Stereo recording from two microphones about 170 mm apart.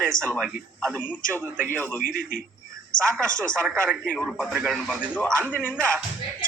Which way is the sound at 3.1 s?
15° right (ahead or behind).